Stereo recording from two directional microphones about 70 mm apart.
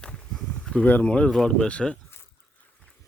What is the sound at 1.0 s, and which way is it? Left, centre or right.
Speech, centre.